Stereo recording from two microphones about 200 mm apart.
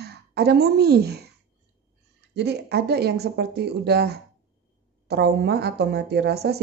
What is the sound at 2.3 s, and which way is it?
A woman's voice, 55° right (ahead or behind).